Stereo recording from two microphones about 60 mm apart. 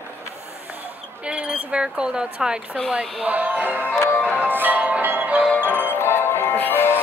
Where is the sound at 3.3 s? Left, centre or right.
Right.